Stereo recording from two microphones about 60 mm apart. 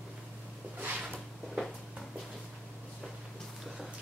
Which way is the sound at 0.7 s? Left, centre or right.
Right.